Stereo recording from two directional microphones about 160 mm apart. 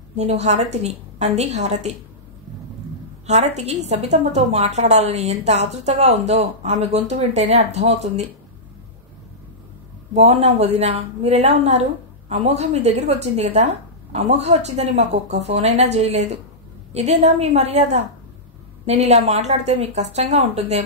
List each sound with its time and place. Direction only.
0.1 s a woman's voice: 45° right (ahead or behind)
3.3 s a woman's voice: 45° right (ahead or behind)
10.1 s a woman's voice: 40° right (ahead or behind)